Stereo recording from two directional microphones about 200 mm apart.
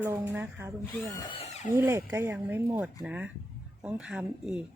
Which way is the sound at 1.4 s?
35° left (ahead or behind).